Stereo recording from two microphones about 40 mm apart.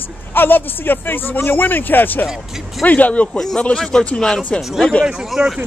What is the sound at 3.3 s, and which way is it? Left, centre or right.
Speech, centre.